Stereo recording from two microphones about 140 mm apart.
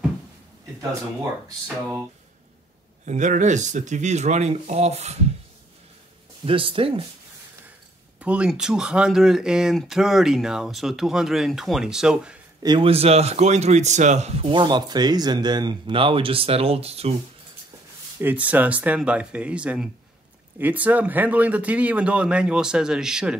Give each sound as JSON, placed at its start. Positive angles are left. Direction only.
{"t": 3.1, "sound": "speech", "side_deg": -60}
{"t": 6.4, "sound": "speech", "side_deg": -40}
{"t": 8.2, "sound": "speech", "side_deg": -10}
{"t": 12.6, "sound": "speech", "side_deg": -40}
{"t": 14.4, "sound": "speech", "side_deg": -35}
{"t": 18.2, "sound": "speech", "side_deg": -10}